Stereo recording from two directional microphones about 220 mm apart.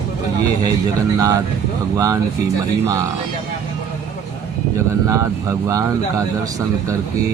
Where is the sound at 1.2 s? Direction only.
15° right (ahead or behind).